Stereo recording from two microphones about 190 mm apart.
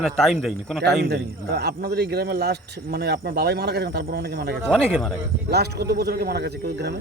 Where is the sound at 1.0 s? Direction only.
60° right (ahead or behind).